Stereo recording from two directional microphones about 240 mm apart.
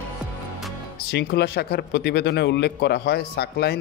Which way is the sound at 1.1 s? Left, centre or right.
Left.